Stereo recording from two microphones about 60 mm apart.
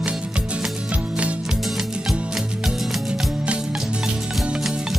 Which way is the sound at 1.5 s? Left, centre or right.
Centre.